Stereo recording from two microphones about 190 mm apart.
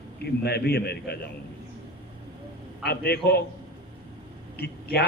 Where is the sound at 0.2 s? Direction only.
60° left (ahead or behind).